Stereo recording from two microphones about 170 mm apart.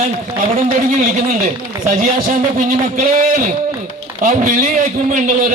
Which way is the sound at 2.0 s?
50° right (ahead or behind).